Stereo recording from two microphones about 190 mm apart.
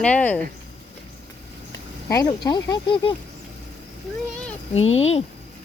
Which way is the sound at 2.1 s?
20° left (ahead or behind).